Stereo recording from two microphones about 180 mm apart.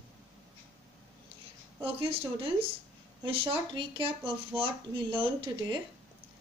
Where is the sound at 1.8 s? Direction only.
30° right (ahead or behind).